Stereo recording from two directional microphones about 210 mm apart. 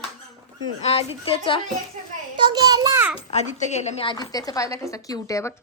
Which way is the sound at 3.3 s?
35° left (ahead or behind).